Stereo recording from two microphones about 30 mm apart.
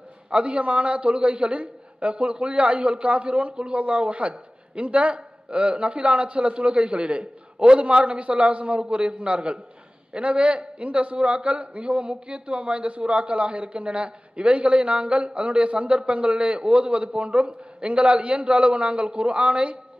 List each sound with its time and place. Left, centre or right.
0.3 s a man's voice: right